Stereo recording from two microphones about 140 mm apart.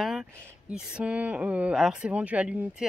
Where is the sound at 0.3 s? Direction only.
10° right (ahead or behind).